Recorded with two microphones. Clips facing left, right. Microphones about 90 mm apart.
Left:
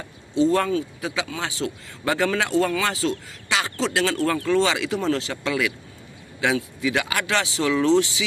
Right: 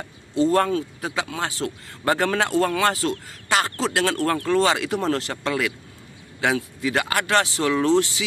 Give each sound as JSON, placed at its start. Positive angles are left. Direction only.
{"t": 0.4, "sound": "speech", "side_deg": -45}